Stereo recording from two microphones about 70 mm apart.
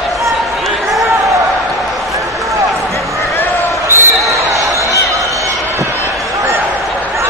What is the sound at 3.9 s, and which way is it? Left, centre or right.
Basketball bounce, right.